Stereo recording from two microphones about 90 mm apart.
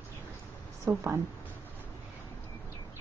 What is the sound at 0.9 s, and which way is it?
Speech, 20° right (ahead or behind).